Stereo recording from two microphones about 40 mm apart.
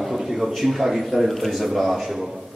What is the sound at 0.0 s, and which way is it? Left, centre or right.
A man's voice, centre.